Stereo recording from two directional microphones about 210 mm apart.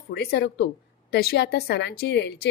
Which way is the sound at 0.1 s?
50° left (ahead or behind).